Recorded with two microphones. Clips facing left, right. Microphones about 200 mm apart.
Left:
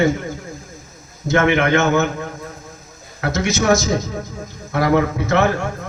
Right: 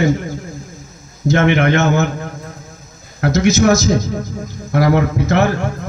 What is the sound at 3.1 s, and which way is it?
Speech, 40° right (ahead or behind).